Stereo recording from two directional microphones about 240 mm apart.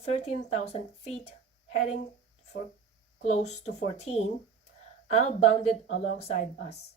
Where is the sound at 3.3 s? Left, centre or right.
Left.